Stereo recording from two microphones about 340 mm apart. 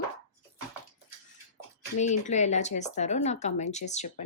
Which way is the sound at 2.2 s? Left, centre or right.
Centre.